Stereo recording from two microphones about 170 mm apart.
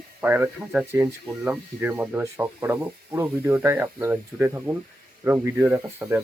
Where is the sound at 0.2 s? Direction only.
10° right (ahead or behind).